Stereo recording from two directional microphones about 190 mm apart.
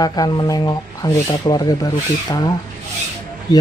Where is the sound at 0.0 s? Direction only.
20° left (ahead or behind).